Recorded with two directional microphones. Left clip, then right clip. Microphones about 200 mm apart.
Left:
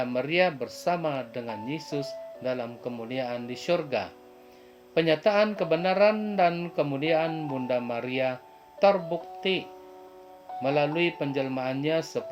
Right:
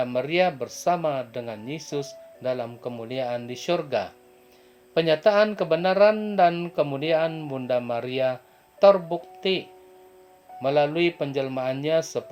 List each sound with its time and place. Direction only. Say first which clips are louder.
0.0 s speech: right 2 dB; 30° right (ahead or behind)